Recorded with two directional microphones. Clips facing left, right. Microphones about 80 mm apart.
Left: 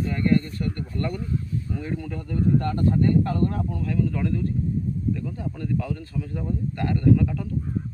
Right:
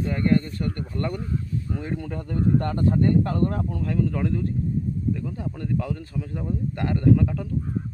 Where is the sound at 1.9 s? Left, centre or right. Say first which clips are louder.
Even; right.